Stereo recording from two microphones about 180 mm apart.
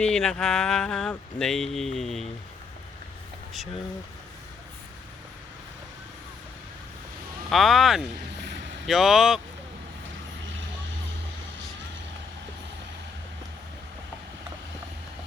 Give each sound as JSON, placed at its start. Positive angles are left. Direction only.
{"t": 0.0, "sound": "speech", "side_deg": 5}
{"t": 7.5, "sound": "speech", "side_deg": 0}
{"t": 8.4, "sound": "vehicle", "side_deg": -70}
{"t": 8.9, "sound": "speech", "side_deg": 0}